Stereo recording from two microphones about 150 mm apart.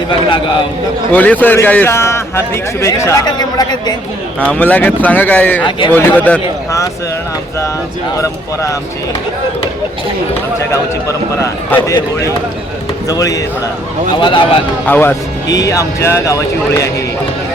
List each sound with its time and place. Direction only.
1.1 s a man's voice: 10° left (ahead or behind); by 3.9 s 25° left (ahead or behind)
4.4 s a man's voice: 10° left (ahead or behind)
11.3 s speech: 20° left (ahead or behind)
14.2 s speech: 35° left (ahead or behind)
14.8 s a man's voice: 15° left (ahead or behind)